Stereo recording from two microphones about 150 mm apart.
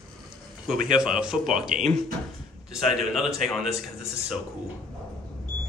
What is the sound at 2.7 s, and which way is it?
Speech, 5° right (ahead or behind).